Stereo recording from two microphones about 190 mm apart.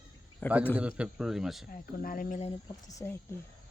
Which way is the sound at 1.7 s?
50° left (ahead or behind).